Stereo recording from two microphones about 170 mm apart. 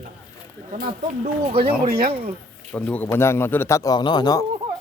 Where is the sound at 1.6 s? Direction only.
60° right (ahead or behind).